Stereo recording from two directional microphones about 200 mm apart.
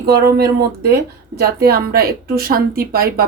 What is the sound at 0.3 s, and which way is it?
Speech, 50° right (ahead or behind).